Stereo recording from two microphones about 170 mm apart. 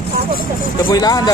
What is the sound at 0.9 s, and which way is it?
Speech, 20° left (ahead or behind).